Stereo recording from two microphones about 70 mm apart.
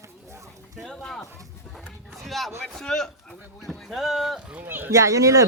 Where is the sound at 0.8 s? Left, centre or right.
Centre.